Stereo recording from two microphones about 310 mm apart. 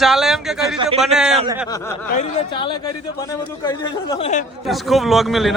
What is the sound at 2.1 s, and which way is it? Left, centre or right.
Speech, centre.